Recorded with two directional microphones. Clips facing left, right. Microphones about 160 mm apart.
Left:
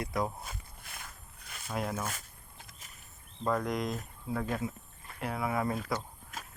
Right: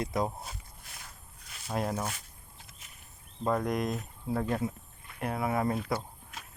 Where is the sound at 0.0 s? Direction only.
20° right (ahead or behind).